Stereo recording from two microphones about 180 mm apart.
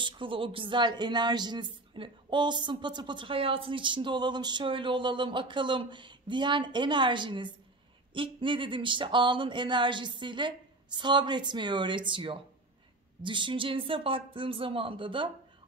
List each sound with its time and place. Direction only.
0.0 s speech: 30° right (ahead or behind)